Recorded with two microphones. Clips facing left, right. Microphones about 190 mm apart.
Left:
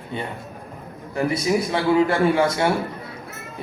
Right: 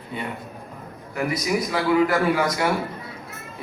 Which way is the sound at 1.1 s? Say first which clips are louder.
Left 3 dB; 30° left (ahead or behind).